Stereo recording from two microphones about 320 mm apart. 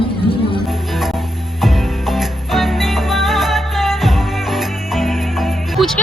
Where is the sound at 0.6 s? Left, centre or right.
Centre.